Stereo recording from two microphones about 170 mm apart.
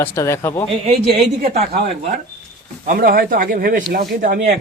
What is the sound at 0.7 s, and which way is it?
Speech, 35° right (ahead or behind).